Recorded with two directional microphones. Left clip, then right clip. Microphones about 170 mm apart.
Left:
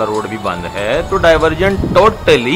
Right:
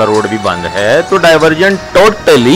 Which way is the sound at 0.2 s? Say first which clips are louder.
Right 7 dB; 40° right (ahead or behind).